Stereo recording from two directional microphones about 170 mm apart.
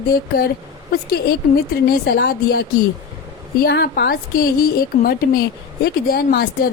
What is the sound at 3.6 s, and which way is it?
A woman's voice, 70° left (ahead or behind).